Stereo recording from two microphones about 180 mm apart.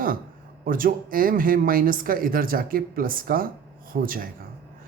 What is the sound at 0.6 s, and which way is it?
Speech, 50° right (ahead or behind).